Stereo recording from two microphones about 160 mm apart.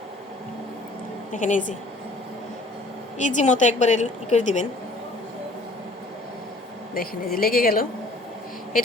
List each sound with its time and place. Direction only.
1.3 s a woman's voice: 50° left (ahead or behind)
3.2 s a woman's voice: 50° left (ahead or behind)
6.9 s a woman's voice: 65° left (ahead or behind)